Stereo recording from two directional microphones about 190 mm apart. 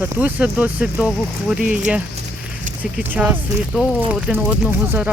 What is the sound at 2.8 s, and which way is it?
Speech, 10° right (ahead or behind).